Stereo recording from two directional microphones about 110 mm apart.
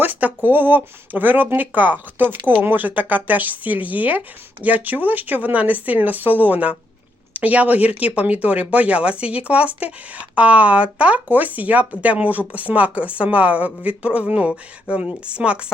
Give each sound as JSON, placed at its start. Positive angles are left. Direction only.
{"t": 0.0, "sound": "speech", "side_deg": -15}